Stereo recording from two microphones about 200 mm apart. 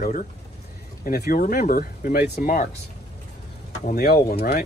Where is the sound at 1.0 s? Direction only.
50° left (ahead or behind).